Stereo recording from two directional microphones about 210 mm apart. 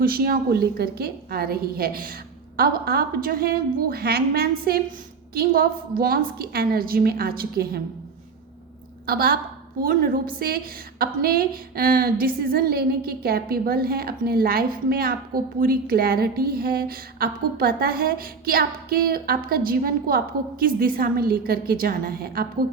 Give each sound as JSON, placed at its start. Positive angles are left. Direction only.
{"t": 0.0, "sound": "a woman's voice", "side_deg": -45}
{"t": 9.0, "sound": "a woman's voice", "side_deg": -45}